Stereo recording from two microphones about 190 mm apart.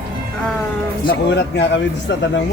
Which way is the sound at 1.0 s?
70° left (ahead or behind).